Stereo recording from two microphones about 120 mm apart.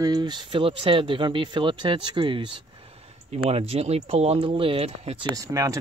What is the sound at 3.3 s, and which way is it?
Speech, 60° right (ahead or behind).